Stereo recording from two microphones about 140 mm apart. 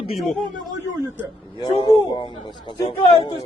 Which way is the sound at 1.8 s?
40° left (ahead or behind).